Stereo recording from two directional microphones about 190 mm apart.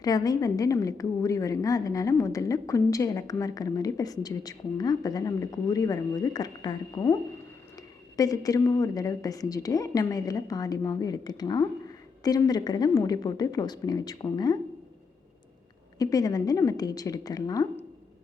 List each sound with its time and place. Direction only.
0.0 s a woman's voice: 20° left (ahead or behind)
16.0 s a woman's voice: 20° left (ahead or behind)